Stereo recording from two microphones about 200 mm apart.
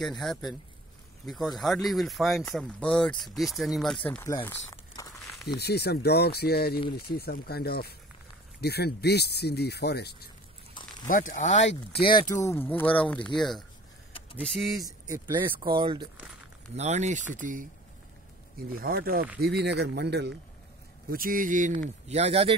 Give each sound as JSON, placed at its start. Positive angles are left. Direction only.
{"t": 0.0, "sound": "speech", "side_deg": 0}
{"t": 4.2, "sound": "a sound", "side_deg": 15}
{"t": 5.6, "sound": "speech", "side_deg": 55}
{"t": 11.1, "sound": "speech", "side_deg": 40}
{"t": 12.1, "sound": "speech", "side_deg": 15}
{"t": 14.8, "sound": "speech", "side_deg": -15}
{"t": 18.7, "sound": "speech", "side_deg": -45}
{"t": 21.1, "sound": "speech", "side_deg": -45}